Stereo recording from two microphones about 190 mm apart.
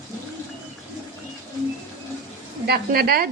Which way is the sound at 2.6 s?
55° right (ahead or behind).